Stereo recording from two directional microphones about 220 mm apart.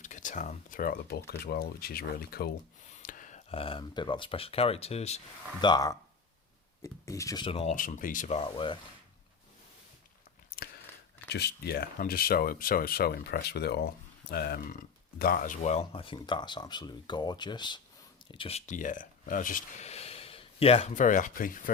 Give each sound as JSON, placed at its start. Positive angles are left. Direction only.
{"t": 0.0, "sound": "speech", "side_deg": 35}
{"t": 5.6, "sound": "speech", "side_deg": 20}
{"t": 11.3, "sound": "speech", "side_deg": 45}